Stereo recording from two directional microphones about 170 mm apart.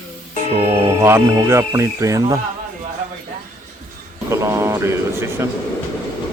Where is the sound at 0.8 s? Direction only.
15° right (ahead or behind).